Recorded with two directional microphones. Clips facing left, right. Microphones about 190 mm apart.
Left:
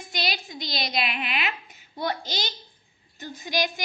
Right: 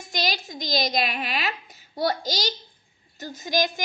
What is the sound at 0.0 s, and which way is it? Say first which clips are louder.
A woman's voice: right 3 dB; 45° right (ahead or behind).